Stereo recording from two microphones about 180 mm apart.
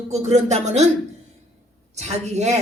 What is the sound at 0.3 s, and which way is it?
Speech, 40° right (ahead or behind).